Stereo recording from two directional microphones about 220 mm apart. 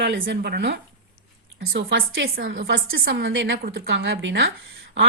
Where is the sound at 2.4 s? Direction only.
45° right (ahead or behind).